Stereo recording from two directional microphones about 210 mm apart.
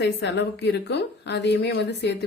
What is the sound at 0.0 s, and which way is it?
A woman's voice, 55° left (ahead or behind).